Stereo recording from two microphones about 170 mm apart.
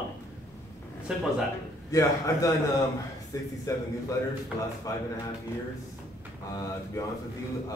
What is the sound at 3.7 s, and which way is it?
Speech, 20° left (ahead or behind).